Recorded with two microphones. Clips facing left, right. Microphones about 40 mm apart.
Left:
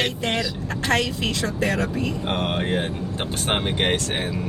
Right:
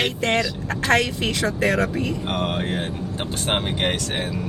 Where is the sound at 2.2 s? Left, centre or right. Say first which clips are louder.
Even; centre.